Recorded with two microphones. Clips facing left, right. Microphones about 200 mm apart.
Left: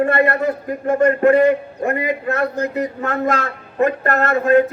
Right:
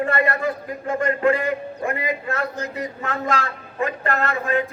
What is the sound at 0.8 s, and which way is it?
A man's voice, 45° left (ahead or behind).